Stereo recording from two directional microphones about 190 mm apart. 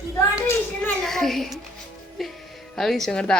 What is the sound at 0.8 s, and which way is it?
Speech, centre (ahead or behind).